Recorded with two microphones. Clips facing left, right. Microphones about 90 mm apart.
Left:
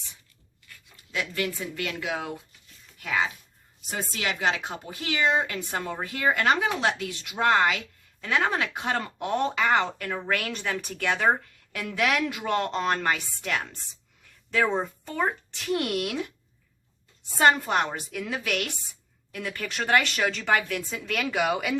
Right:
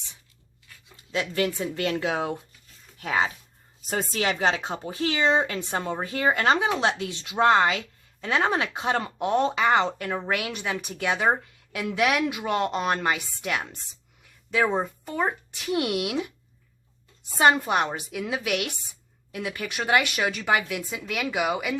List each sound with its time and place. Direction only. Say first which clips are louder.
0.9 s a woman's voice: right 4 dB; 25° right (ahead or behind)
17.3 s a woman's voice: right 1 dB; 15° right (ahead or behind)